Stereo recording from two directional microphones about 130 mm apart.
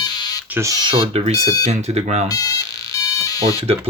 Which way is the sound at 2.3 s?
30° left (ahead or behind).